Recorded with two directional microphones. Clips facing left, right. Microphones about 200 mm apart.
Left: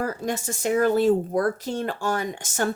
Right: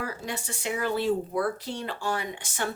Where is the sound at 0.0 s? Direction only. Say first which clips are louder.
Left 7 dB; 45° left (ahead or behind).